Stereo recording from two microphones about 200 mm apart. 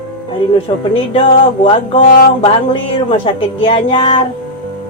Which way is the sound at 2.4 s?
25° left (ahead or behind).